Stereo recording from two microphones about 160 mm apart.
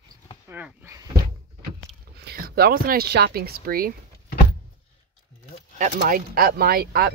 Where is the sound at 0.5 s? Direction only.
10° right (ahead or behind).